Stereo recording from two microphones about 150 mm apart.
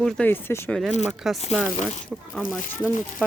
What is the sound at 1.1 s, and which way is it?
Speech, centre (ahead or behind).